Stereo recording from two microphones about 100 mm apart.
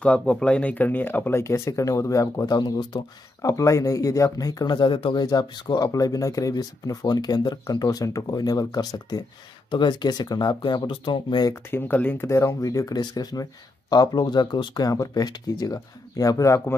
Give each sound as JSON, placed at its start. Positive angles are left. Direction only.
{"t": 0.0, "sound": "speech", "side_deg": 10}
{"t": 3.4, "sound": "speech", "side_deg": 30}
{"t": 11.7, "sound": "speech", "side_deg": 20}